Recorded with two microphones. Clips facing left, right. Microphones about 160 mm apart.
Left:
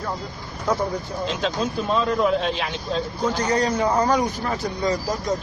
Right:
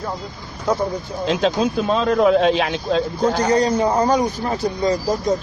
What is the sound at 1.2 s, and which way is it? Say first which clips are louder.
Speech: right 7 dB; 75° right (ahead or behind).